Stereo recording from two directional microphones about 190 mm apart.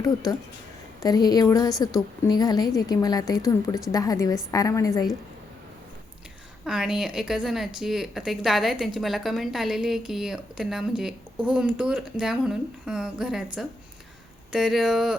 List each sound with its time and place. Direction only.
0.9 s a woman's voice: 20° left (ahead or behind)
6.7 s a woman's voice: 5° right (ahead or behind)
14.5 s a woman's voice: centre (ahead or behind)